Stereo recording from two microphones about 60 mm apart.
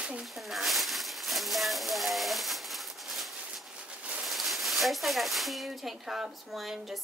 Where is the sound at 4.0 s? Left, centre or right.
Right.